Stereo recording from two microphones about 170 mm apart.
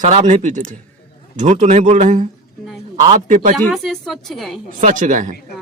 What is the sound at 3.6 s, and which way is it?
Speech, centre (ahead or behind).